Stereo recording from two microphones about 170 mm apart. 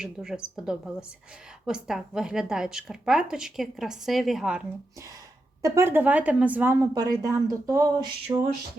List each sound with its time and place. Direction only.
0.0 s a woman's voice: 5° right (ahead or behind)
5.6 s a woman's voice: 15° right (ahead or behind)